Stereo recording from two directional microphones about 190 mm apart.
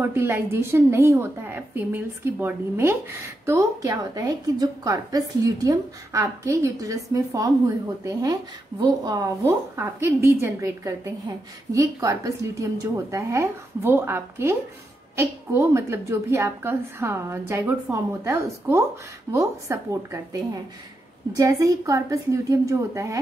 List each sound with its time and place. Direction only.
0.0 s a woman's voice: 10° right (ahead or behind)